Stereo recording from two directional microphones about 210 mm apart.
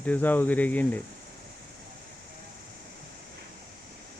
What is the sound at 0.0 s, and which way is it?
Speech, 10° left (ahead or behind).